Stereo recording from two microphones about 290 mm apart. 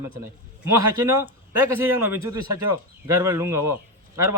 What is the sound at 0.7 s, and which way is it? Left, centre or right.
Speech, centre.